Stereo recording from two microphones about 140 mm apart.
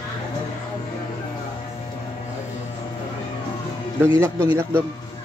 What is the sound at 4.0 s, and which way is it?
Speech, 20° right (ahead or behind).